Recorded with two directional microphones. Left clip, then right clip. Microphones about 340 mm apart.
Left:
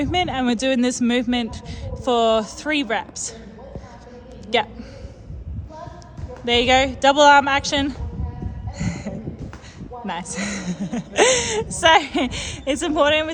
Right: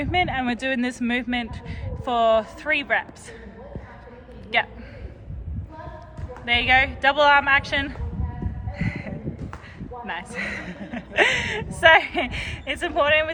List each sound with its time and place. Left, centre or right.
0.0 s a man's voice: left
6.4 s a man's voice: centre
8.8 s a sound: centre
10.1 s a man's voice: centre